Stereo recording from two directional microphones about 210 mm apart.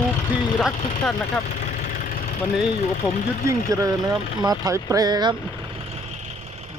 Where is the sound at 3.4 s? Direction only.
15° right (ahead or behind).